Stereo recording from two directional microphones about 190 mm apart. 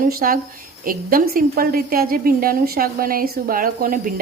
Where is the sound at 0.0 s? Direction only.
50° right (ahead or behind).